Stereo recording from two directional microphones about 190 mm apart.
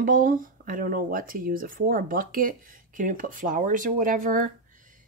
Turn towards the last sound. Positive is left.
turn(degrees=-45)  # may be behind; listen again after turning